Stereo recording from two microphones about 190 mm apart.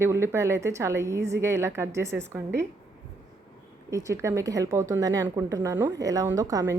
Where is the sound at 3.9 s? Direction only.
15° right (ahead or behind).